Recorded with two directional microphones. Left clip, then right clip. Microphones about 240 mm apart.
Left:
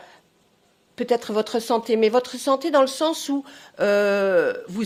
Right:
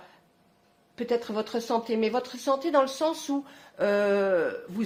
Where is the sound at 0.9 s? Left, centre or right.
Left.